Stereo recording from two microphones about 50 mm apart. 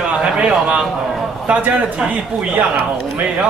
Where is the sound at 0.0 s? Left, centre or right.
Right.